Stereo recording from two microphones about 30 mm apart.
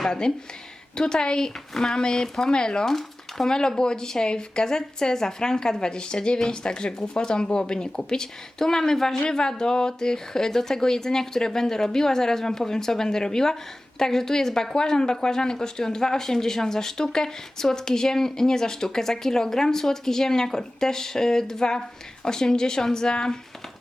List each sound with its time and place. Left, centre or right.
0.9 s a woman's voice: left
2.8 s speech: centre
3.5 s a woman's voice: left